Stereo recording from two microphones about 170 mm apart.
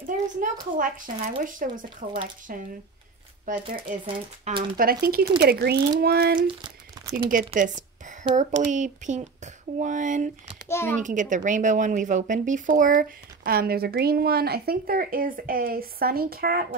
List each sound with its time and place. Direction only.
0.0 s speech: 55° right (ahead or behind)
4.0 s speech: 35° right (ahead or behind)
4.7 s speech: 60° right (ahead or behind)
6.4 s a sound: 25° right (ahead or behind)
7.2 s a woman's voice: 50° right (ahead or behind)
10.7 s speech: 15° left (ahead or behind)
11.0 s speech: 50° right (ahead or behind)